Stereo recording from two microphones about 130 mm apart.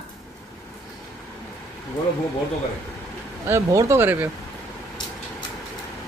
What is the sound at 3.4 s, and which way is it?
Speech, 20° right (ahead or behind).